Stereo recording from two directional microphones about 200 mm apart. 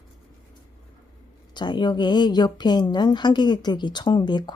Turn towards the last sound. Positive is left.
turn(degrees=20)  # may be behind; listen again after turning